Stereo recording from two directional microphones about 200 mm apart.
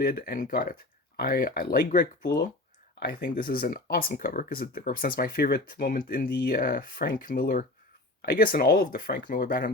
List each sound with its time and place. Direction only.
0.0 s speech: 50° left (ahead or behind)
2.2 s speech: 55° left (ahead or behind)